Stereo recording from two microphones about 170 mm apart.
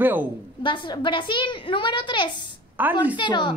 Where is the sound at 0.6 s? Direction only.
30° left (ahead or behind).